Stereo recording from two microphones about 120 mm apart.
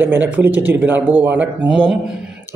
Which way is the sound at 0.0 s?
15° right (ahead or behind).